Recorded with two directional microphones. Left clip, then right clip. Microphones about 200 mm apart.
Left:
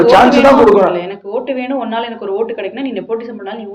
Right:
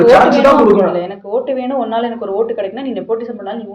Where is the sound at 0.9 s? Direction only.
50° right (ahead or behind).